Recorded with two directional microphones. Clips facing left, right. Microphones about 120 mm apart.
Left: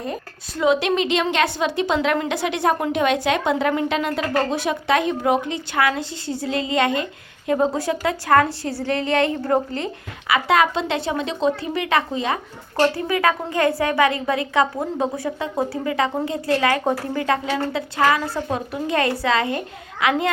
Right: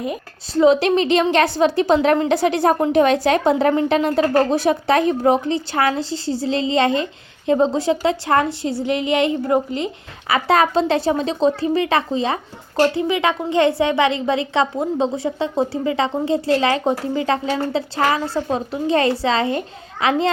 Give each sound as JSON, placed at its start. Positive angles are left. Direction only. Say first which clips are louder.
{"t": 0.5, "sound": "a woman's voice", "louder": "right 5 dB", "side_deg": -35}
{"t": 10.2, "sound": "a woman's voice", "louder": "right 1 dB", "side_deg": -35}
{"t": 12.8, "sound": "a woman's voice", "louder": "right 2 dB", "side_deg": -20}